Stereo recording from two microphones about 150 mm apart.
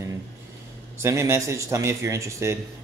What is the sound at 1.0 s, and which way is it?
Speech, 20° right (ahead or behind).